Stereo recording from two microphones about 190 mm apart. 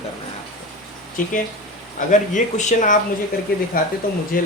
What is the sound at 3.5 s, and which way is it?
Speech, 50° left (ahead or behind).